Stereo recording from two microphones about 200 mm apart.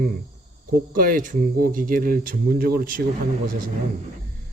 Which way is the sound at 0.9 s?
45° right (ahead or behind).